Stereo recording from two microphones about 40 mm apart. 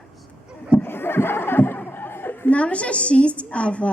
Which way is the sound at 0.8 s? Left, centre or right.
Left.